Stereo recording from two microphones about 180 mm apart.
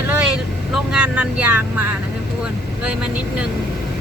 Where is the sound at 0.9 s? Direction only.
5° right (ahead or behind).